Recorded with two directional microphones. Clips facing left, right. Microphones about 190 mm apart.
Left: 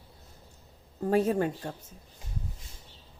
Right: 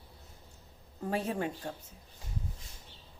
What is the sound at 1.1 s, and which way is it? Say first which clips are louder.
Speech: left 8 dB; 45° left (ahead or behind).